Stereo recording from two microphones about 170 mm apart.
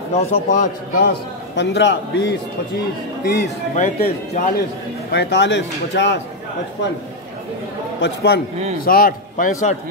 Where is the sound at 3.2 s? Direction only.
70° left (ahead or behind).